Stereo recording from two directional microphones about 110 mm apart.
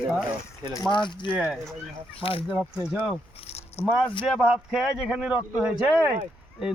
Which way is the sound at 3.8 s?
65° left (ahead or behind).